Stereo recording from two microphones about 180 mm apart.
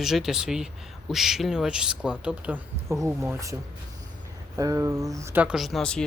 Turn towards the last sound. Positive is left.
turn(degrees=5)  # may be behind; listen again after turning